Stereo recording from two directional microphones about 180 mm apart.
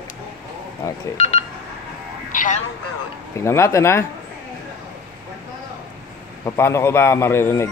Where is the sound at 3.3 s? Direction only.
15° left (ahead or behind).